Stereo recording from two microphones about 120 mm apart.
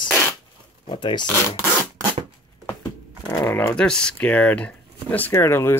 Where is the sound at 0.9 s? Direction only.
40° left (ahead or behind).